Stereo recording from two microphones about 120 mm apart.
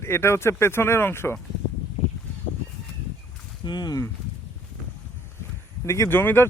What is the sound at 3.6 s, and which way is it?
Speech, 40° left (ahead or behind).